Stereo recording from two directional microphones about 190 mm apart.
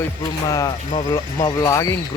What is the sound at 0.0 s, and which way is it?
Speech, 15° left (ahead or behind).